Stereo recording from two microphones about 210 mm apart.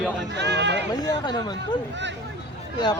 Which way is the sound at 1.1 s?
20° left (ahead or behind).